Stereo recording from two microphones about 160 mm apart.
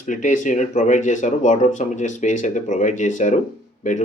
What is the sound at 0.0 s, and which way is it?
Speech, 50° left (ahead or behind).